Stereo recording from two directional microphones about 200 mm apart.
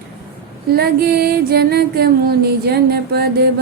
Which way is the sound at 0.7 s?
50° right (ahead or behind).